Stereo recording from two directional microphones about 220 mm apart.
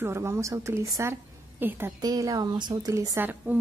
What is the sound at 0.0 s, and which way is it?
A woman's voice, 10° right (ahead or behind).